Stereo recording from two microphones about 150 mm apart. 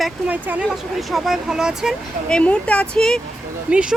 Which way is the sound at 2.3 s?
10° left (ahead or behind).